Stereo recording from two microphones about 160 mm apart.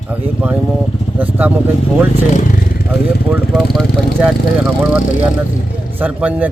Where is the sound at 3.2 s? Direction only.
5° right (ahead or behind).